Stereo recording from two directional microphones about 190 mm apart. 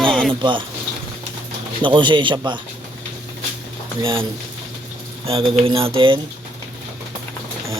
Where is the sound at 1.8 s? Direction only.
25° right (ahead or behind).